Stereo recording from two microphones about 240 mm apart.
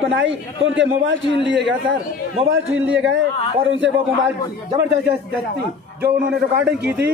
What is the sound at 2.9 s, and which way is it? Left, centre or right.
Speech, right.